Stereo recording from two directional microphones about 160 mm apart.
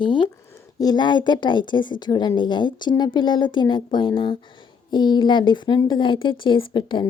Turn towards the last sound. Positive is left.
turn(degrees=30)  # may be behind; listen again after turning